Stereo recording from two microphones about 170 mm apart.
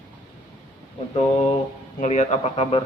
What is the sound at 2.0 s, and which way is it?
Speech, 45° left (ahead or behind).